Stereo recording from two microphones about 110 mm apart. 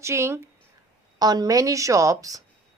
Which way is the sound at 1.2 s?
35° right (ahead or behind).